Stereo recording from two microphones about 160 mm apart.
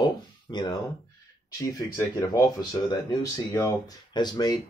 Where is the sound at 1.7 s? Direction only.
20° left (ahead or behind).